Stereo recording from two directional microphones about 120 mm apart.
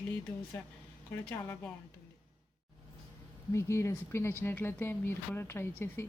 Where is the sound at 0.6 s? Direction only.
15° left (ahead or behind).